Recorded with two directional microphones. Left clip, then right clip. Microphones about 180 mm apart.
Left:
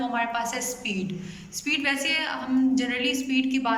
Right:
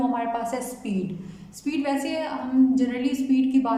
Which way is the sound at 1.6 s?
30° right (ahead or behind).